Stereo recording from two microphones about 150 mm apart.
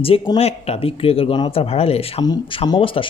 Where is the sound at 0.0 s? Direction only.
40° left (ahead or behind).